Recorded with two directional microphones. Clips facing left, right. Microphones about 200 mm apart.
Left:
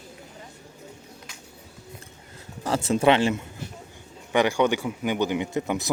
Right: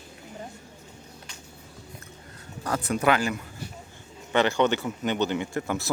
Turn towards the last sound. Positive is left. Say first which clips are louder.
# left 2 dB
turn(degrees=20)  # may be behind; listen again after turning